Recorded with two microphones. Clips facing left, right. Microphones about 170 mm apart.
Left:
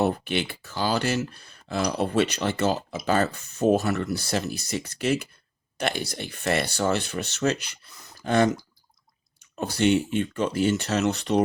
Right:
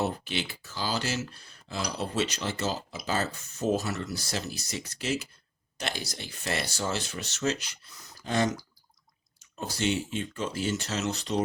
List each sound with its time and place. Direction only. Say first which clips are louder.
0.0 s speech: left 6 dB; 60° left (ahead or behind)